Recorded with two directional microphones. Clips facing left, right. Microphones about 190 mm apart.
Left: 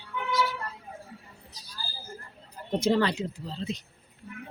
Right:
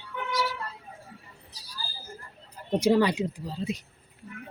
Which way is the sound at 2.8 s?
10° right (ahead or behind).